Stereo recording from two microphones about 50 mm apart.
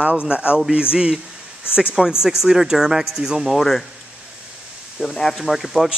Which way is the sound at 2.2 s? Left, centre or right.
Centre.